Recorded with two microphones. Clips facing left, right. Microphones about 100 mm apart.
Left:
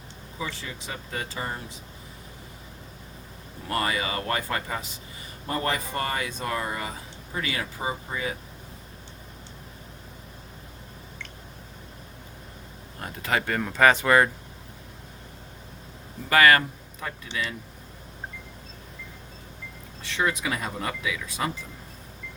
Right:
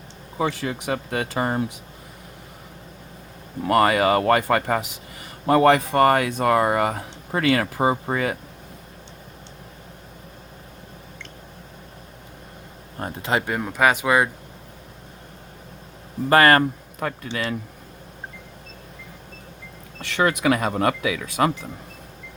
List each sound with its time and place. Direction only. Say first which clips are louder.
0.3 s speech: right 11 dB; 65° right (ahead or behind)
3.7 s speech: right 11 dB; 65° right (ahead or behind)
13.0 s speech: right 7 dB; 35° right (ahead or behind)
13.2 s speech: right 2 dB; 20° right (ahead or behind)
16.3 s speech: right 4 dB; 40° right (ahead or behind)
17.0 s speech: right 6 dB; 60° right (ahead or behind)
20.0 s speech: right 6 dB; 70° right (ahead or behind)